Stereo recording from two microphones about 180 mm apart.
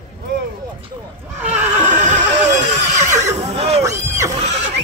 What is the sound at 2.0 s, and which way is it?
Neigh, 40° right (ahead or behind).